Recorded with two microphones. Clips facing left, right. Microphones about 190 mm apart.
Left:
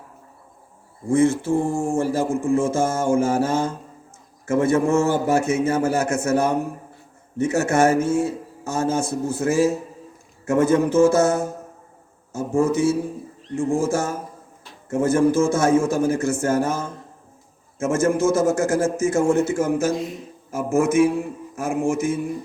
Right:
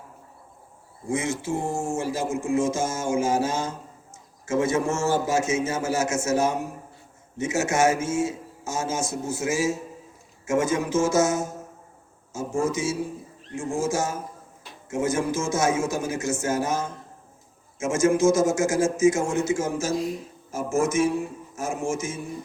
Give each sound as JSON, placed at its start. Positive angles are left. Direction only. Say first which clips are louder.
{"t": 1.1, "sound": "a man's voice", "louder": "left 9 dB", "side_deg": 55}
{"t": 12.6, "sound": "a man's voice", "louder": "left 6 dB", "side_deg": 60}
{"t": 20.0, "sound": "speech", "louder": "right 1 dB", "side_deg": 0}
{"t": 20.5, "sound": "a man's voice", "louder": "left 4 dB", "side_deg": 55}